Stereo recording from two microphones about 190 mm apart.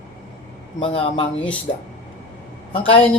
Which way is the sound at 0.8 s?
25° left (ahead or behind).